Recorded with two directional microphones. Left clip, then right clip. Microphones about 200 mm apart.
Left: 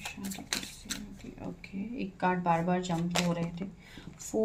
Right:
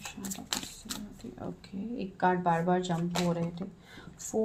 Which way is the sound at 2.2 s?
20° right (ahead or behind).